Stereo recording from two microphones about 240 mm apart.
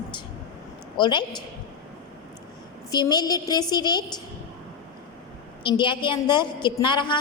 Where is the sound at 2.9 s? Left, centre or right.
Centre.